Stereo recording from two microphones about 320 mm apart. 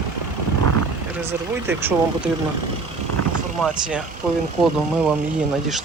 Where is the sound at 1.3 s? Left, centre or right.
Centre.